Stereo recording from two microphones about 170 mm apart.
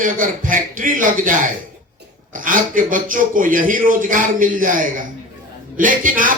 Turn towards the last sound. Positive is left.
turn(degrees=-55)  # may be behind; listen again after turning